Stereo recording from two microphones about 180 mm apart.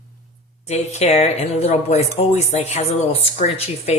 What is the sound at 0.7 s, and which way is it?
Speech, 35° left (ahead or behind).